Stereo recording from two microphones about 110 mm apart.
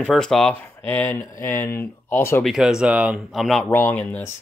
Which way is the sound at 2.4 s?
5° right (ahead or behind).